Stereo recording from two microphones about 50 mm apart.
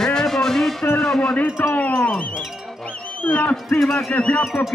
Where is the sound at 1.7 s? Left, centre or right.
Left.